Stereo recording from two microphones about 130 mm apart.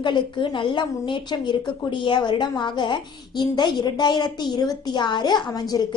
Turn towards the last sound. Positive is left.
turn(degrees=30)  # may be behind; listen again after turning